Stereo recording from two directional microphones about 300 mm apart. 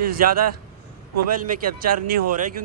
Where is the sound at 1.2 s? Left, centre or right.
Right.